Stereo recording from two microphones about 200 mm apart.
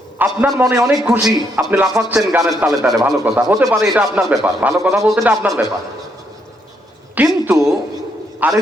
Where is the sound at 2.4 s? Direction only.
15° right (ahead or behind).